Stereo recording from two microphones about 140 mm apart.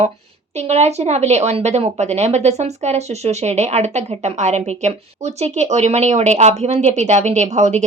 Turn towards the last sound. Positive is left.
turn(degrees=-55)  # may be behind; listen again after turning